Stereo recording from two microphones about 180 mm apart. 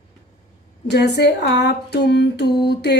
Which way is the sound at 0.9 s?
65° left (ahead or behind).